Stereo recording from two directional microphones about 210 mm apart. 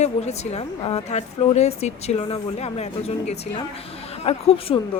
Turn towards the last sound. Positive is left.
turn(degrees=30)  # may be behind; listen again after turning